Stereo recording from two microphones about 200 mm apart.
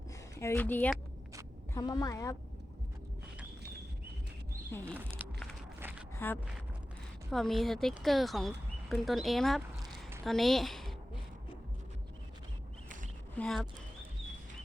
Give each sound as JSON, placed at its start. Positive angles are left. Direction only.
{"t": 0.3, "sound": "speech", "side_deg": 10}
{"t": 1.7, "sound": "speech", "side_deg": 20}
{"t": 4.9, "sound": "speech", "side_deg": -10}
{"t": 5.8, "sound": "a sound", "side_deg": -10}
{"t": 6.1, "sound": "a woman's voice", "side_deg": 10}
{"t": 13.3, "sound": "speech", "side_deg": 5}